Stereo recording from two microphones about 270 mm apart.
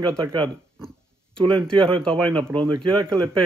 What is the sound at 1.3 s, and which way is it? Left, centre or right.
Speech, centre.